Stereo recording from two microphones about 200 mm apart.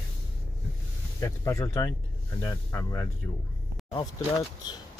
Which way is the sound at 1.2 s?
15° left (ahead or behind).